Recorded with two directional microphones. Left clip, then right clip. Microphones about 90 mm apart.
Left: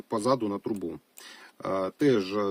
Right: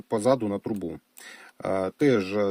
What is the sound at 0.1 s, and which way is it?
Speech, 40° right (ahead or behind).